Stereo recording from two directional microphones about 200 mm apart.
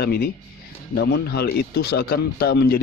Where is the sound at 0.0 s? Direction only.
50° left (ahead or behind).